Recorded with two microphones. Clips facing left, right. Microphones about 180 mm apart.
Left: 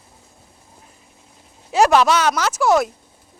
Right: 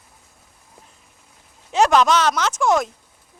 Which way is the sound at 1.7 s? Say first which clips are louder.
Left 1 dB; 10° left (ahead or behind).